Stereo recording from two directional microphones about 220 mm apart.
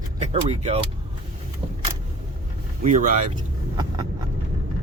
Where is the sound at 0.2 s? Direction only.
30° right (ahead or behind).